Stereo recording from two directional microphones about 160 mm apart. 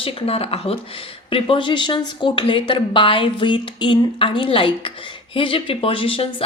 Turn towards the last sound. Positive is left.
turn(degrees=35)  # may be behind; listen again after turning